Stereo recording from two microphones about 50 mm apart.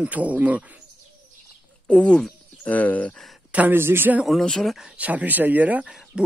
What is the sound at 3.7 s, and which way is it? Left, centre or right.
Speech, right.